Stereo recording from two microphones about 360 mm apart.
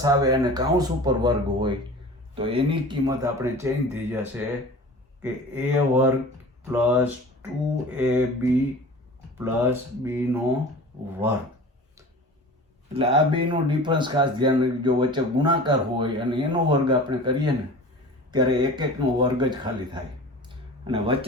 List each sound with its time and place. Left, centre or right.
0.0 s speech: centre
12.9 s speech: centre
20.4 s a sound: centre